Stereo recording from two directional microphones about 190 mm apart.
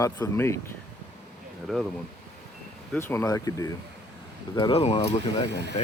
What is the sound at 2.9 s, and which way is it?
Speech, 10° left (ahead or behind).